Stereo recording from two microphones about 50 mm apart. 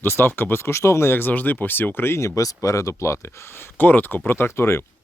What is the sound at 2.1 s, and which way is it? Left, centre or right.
Speech, left.